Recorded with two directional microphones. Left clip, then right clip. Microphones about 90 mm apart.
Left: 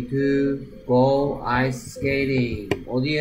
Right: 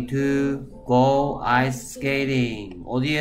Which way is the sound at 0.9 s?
10° right (ahead or behind).